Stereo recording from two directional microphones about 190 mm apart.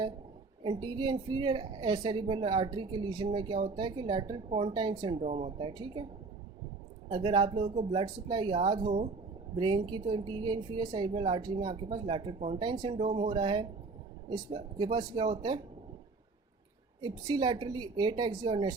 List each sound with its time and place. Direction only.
0.6 s a woman's voice: 25° right (ahead or behind)
7.1 s a woman's voice: 25° right (ahead or behind)
17.0 s a woman's voice: 20° right (ahead or behind)